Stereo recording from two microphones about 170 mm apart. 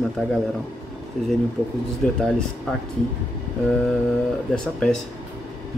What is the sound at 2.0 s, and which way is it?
Speech, 5° left (ahead or behind).